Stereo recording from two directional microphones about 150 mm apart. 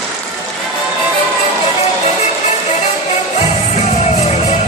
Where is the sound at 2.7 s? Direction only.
45° left (ahead or behind).